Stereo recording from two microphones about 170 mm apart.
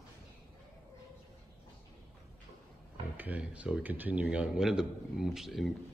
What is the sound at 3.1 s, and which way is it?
Speech, 10° right (ahead or behind).